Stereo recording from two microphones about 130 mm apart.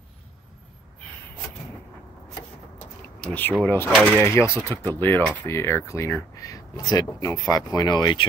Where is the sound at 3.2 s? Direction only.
10° left (ahead or behind).